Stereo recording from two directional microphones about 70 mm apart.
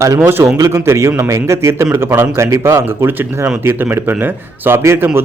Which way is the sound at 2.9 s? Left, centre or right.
Right.